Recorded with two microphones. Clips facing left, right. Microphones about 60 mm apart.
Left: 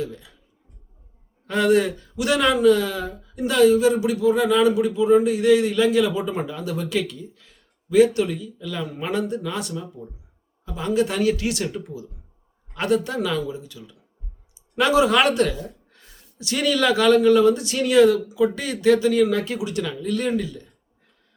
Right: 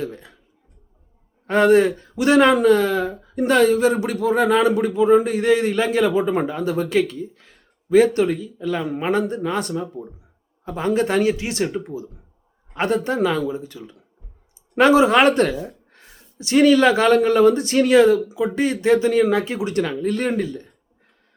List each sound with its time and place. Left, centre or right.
0.0 s speech: right
1.5 s speech: right